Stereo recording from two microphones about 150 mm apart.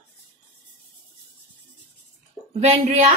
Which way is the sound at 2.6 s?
50° right (ahead or behind).